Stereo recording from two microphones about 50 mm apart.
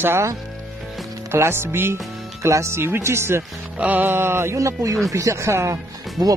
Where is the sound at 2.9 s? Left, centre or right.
Right.